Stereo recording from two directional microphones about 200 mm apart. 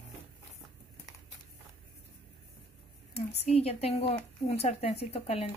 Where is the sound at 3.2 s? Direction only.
30° left (ahead or behind).